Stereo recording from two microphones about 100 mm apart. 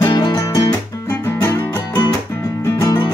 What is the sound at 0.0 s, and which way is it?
Music, 55° left (ahead or behind).